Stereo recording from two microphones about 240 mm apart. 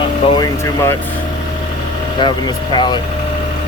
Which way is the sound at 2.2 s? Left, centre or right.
Centre.